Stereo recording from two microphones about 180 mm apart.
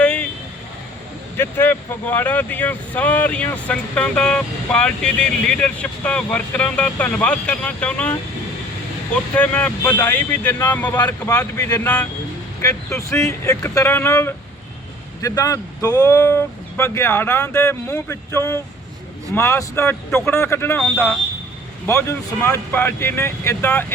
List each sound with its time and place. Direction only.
0.0 s vehicle: 10° left (ahead or behind)
1.4 s speech: 10° left (ahead or behind)
9.3 s speech: 5° left (ahead or behind)
10.9 s speech: 20° left (ahead or behind)